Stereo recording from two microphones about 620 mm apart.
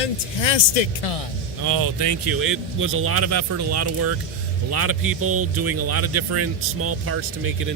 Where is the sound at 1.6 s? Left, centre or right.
Right.